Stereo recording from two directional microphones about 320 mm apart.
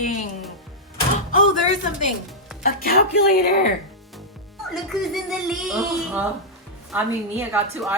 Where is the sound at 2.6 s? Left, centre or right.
Left.